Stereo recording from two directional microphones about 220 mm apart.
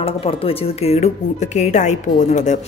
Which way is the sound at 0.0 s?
25° left (ahead or behind).